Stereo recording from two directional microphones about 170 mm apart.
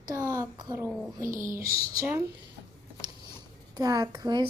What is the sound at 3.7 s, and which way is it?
Speech, 20° right (ahead or behind).